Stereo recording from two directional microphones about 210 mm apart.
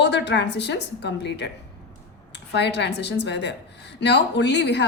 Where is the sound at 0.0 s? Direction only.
55° left (ahead or behind).